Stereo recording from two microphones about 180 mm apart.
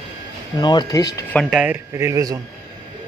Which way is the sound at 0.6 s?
25° left (ahead or behind).